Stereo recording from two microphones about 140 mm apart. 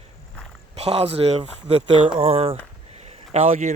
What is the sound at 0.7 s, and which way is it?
Speech, 45° right (ahead or behind).